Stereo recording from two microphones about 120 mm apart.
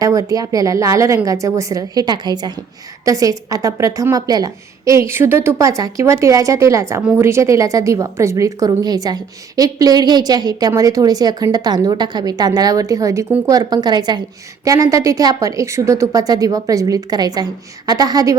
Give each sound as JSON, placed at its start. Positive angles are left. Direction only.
{"t": 0.0, "sound": "a woman's voice", "side_deg": -30}